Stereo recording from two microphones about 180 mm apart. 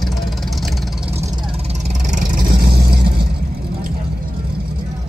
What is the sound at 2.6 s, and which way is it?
Vehicle, 60° right (ahead or behind).